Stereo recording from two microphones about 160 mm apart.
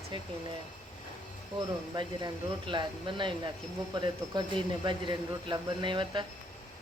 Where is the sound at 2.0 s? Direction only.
30° right (ahead or behind).